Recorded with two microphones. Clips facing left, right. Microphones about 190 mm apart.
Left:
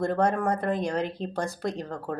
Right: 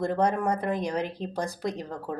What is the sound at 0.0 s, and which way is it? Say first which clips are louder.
A woman's voice: left 1 dB; 15° right (ahead or behind).